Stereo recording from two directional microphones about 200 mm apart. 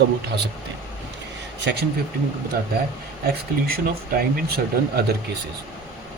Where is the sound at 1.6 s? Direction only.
60° right (ahead or behind).